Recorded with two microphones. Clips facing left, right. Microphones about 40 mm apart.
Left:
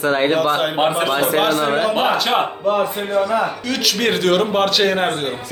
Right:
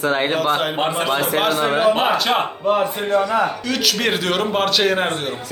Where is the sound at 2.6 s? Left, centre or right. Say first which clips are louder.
Right 2 dB; right.